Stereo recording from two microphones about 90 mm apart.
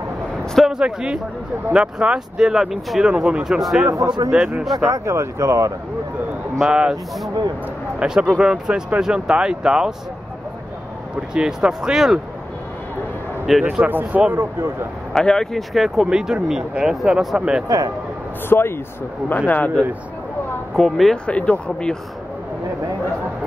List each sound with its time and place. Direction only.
0.6 s speech: 5° right (ahead or behind)
3.8 s speech: 25° right (ahead or behind)
4.3 s speech: 15° right (ahead or behind)
4.8 s speech: 30° right (ahead or behind)
6.6 s speech: 10° right (ahead or behind)
11.1 s speech: 10° right (ahead or behind)
13.7 s speech: 20° right (ahead or behind)
15.1 s speech: 5° left (ahead or behind)
17.6 s speech: 40° right (ahead or behind)
18.5 s speech: 25° left (ahead or behind)
20.7 s speech: 5° left (ahead or behind)